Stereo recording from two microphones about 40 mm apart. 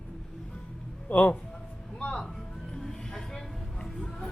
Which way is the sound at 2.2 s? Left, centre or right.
Centre.